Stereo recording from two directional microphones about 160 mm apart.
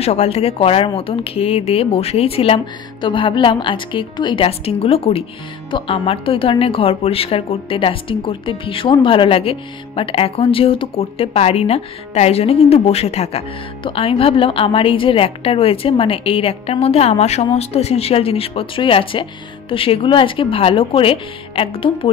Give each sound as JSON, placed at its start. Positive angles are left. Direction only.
{"t": 0.0, "sound": "speech", "side_deg": 40}